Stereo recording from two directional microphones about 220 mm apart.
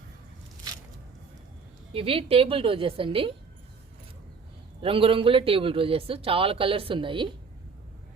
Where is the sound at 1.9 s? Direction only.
25° right (ahead or behind).